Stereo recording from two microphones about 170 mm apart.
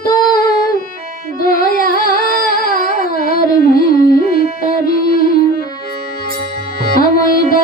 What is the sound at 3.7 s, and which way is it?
Music, 60° left (ahead or behind).